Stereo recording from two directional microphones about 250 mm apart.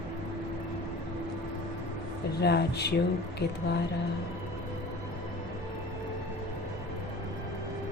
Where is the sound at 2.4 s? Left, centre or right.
Left.